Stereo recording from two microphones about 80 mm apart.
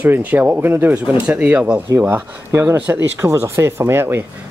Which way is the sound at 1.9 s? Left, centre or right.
Right.